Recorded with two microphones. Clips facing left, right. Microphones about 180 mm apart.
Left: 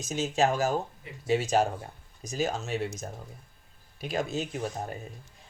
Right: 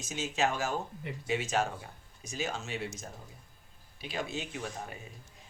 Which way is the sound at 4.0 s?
45° left (ahead or behind).